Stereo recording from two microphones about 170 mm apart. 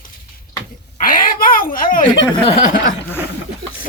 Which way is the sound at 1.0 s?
55° left (ahead or behind).